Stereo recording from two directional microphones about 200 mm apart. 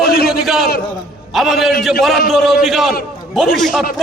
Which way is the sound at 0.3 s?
Centre (ahead or behind).